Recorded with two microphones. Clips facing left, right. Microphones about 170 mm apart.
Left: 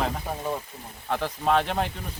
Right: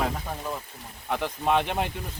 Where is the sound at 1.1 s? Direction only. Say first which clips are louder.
Left 1 dB; 15° right (ahead or behind).